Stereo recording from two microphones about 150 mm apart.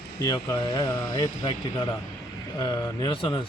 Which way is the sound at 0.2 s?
25° left (ahead or behind).